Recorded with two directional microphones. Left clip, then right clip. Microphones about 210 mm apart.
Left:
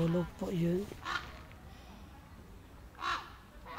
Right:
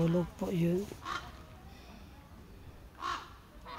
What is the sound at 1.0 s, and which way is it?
Speech, centre (ahead or behind).